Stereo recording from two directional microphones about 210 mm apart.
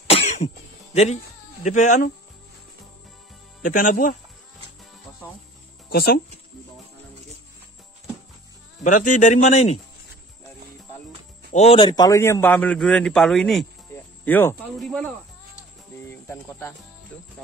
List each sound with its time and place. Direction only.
0.0 s cough: 30° left (ahead or behind)
0.9 s speech: 30° left (ahead or behind)
3.6 s a man's voice: 40° left (ahead or behind)
5.9 s speech: 45° left (ahead or behind)
8.8 s a man's voice: 35° left (ahead or behind)
11.5 s a man's voice: 30° left (ahead or behind); by 15.0 s 5° left (ahead or behind)
16.1 s speech: 10° left (ahead or behind)
17.1 s jingle bell: 5° left (ahead or behind)